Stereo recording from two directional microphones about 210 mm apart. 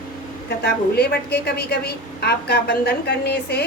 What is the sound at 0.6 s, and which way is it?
A woman's voice, 50° left (ahead or behind).